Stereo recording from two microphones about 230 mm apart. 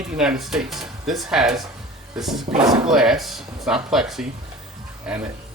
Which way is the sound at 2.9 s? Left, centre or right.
Centre.